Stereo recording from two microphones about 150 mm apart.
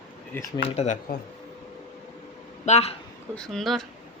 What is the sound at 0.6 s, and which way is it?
Speech, 45° left (ahead or behind).